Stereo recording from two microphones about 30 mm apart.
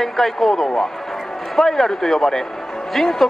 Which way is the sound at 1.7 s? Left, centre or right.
Centre.